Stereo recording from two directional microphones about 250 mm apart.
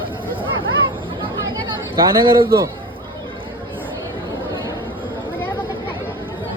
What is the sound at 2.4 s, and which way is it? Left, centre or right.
Speech, centre.